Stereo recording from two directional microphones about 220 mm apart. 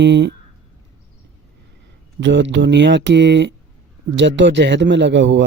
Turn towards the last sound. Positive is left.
turn(degrees=-55)  # may be behind; listen again after turning